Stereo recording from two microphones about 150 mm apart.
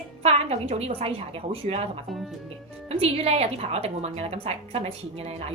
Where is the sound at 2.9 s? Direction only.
40° right (ahead or behind).